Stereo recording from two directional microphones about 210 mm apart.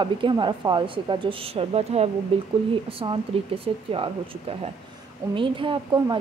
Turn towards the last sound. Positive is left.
turn(degrees=-25)  # may be behind; listen again after turning